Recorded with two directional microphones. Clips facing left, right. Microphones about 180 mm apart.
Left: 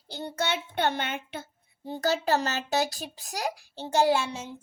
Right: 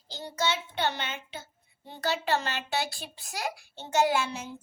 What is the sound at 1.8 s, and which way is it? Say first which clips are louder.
Speech: left 4 dB; 40° left (ahead or behind).